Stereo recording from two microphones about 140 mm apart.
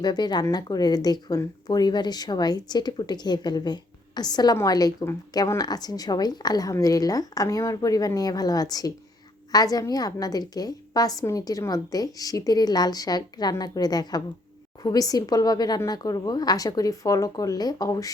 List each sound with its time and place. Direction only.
0.0 s speech: 30° left (ahead or behind)